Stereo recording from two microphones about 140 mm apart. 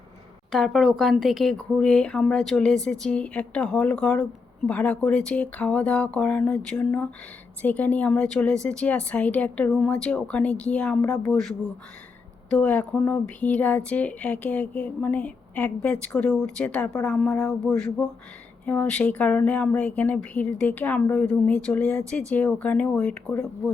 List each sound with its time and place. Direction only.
0.5 s speech: centre (ahead or behind)